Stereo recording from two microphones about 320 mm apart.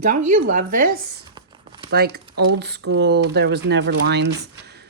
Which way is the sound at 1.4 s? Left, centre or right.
Centre.